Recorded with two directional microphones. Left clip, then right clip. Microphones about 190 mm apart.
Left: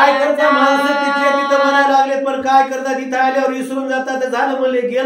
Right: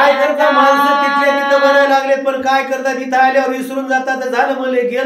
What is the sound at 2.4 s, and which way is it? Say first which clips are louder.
Speech: left 4 dB; 15° right (ahead or behind).